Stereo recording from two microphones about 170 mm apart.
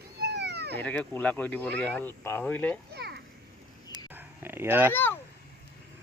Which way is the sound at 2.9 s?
75° right (ahead or behind).